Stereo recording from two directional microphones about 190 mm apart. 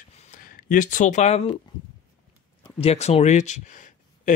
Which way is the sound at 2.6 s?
30° left (ahead or behind).